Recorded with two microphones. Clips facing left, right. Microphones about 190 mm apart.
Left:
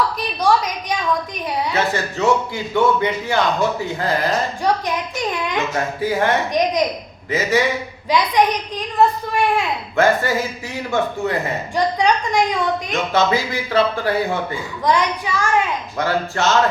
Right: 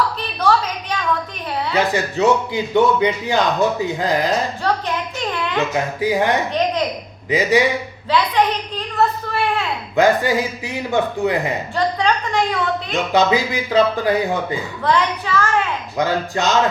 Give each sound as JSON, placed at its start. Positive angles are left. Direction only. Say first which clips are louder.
{"t": 0.2, "sound": "a sound", "louder": "left 1 dB", "side_deg": 10}
{"t": 1.7, "sound": "a man's voice", "louder": "right 2 dB", "side_deg": -15}
{"t": 4.7, "sound": "a woman's voice", "louder": "left 2 dB", "side_deg": 15}
{"t": 5.1, "sound": "a sound", "louder": "even", "side_deg": 15}
{"t": 5.7, "sound": "a man's voice", "louder": "right 2 dB", "side_deg": -15}
{"t": 8.1, "sound": "a sound", "louder": "left 1 dB", "side_deg": 15}
{"t": 9.9, "sound": "a man's voice", "louder": "right 2 dB", "side_deg": -15}
{"t": 11.9, "sound": "a woman's voice", "louder": "left 2 dB", "side_deg": 15}
{"t": 13.1, "sound": "a man's voice", "louder": "right 2 dB", "side_deg": -15}
{"t": 14.8, "sound": "a woman's voice", "louder": "even", "side_deg": 15}
{"t": 16.0, "sound": "a man's voice", "louder": "right 1 dB", "side_deg": -15}